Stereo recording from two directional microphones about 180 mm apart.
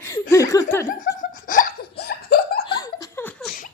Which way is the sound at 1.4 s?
45° left (ahead or behind).